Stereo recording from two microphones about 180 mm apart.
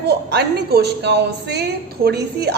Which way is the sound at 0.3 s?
65° right (ahead or behind).